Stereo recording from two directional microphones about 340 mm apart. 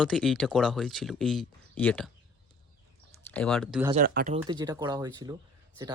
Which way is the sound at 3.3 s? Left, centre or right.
Centre.